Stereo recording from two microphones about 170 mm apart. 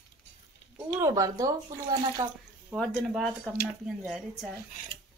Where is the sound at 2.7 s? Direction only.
Centre (ahead or behind).